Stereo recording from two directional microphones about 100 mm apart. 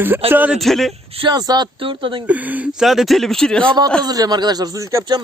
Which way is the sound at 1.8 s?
60° right (ahead or behind).